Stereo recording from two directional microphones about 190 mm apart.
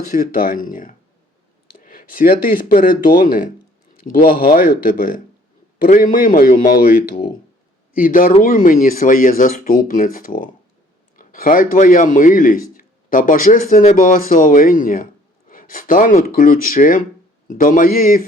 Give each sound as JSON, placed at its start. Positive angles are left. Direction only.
{"t": 0.1, "sound": "a man's voice", "side_deg": 45}